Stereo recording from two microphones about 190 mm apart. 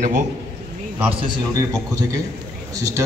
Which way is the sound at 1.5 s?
20° right (ahead or behind).